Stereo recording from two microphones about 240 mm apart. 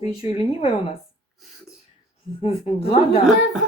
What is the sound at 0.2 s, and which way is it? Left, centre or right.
Speech, left.